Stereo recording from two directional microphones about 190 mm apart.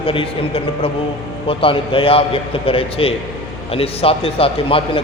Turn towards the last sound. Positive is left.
turn(degrees=30)  # may be behind; listen again after turning